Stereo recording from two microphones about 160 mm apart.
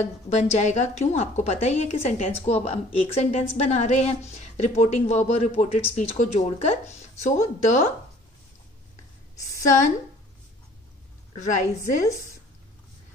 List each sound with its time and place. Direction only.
0.0 s a woman's voice: 40° left (ahead or behind)
11.3 s a woman's voice: 50° left (ahead or behind)